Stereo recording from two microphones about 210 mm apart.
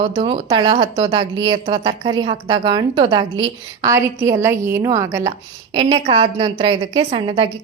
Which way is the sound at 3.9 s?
10° right (ahead or behind).